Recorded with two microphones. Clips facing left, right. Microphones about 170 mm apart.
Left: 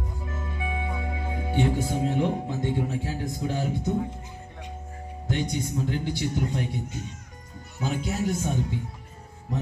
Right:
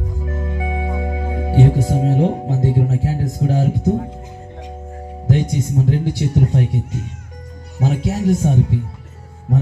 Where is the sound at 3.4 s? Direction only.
40° right (ahead or behind).